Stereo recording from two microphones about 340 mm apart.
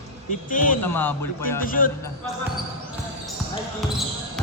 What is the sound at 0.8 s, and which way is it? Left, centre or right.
Speech, centre.